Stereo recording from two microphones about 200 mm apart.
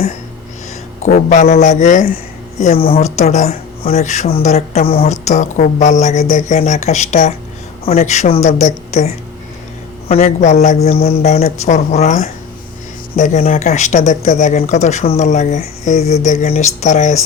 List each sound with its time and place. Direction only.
1.0 s speech: 35° left (ahead or behind)
10.2 s speech: 35° left (ahead or behind)